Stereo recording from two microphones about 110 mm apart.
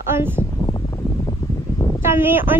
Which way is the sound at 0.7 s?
35° left (ahead or behind).